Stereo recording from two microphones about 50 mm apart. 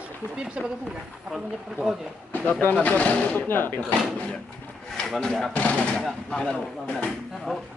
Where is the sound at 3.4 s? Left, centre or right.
Left.